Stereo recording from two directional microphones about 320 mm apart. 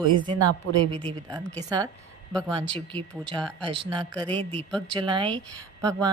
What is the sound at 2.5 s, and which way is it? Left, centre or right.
Speech, centre.